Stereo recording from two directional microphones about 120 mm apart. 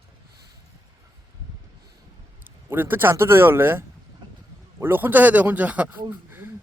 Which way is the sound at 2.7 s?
15° right (ahead or behind).